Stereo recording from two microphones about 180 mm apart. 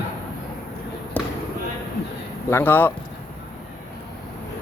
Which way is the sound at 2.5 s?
10° left (ahead or behind).